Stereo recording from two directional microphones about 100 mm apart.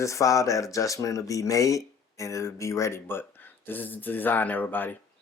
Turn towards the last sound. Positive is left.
turn(degrees=20)  # may be behind; listen again after turning